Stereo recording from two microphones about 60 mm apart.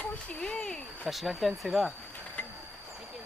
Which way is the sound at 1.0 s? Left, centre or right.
Centre.